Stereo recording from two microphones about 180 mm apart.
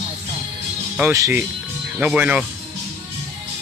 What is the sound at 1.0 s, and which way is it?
Speech, 15° right (ahead or behind).